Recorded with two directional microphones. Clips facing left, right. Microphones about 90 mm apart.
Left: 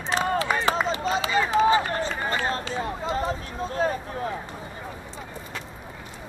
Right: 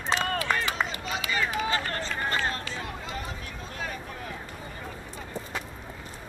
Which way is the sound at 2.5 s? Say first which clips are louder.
Left 6 dB; 25° left (ahead or behind).